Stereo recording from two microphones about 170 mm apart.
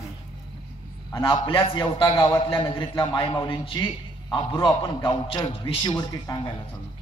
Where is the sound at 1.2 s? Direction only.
30° left (ahead or behind).